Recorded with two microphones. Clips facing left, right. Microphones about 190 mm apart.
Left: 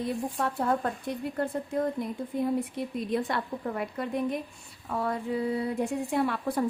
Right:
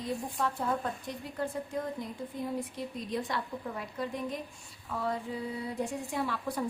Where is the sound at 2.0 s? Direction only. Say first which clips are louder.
Left 7 dB; 60° left (ahead or behind).